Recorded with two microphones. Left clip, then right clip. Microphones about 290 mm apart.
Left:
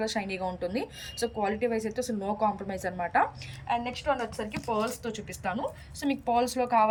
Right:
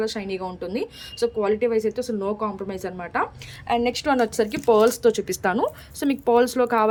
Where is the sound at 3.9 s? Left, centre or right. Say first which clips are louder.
Right 8 dB; right.